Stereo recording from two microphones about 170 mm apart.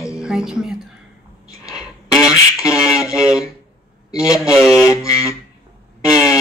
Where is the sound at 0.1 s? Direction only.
5° right (ahead or behind).